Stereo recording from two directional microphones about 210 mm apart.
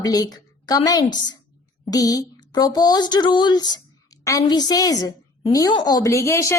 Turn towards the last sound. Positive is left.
turn(degrees=15)  # may be behind; listen again after turning